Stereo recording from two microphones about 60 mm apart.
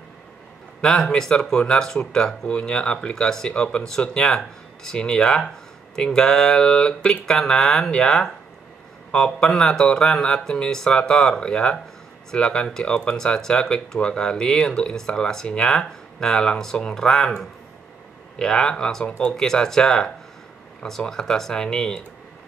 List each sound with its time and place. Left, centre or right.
0.7 s speech: centre